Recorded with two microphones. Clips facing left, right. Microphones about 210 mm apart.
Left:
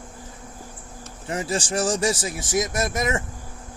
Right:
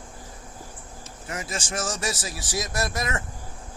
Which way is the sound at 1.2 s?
30° left (ahead or behind).